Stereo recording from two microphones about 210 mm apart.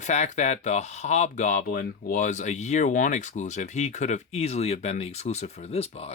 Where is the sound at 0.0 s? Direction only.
35° left (ahead or behind).